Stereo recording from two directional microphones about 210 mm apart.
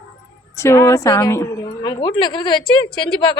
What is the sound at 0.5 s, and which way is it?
Speech, 15° left (ahead or behind).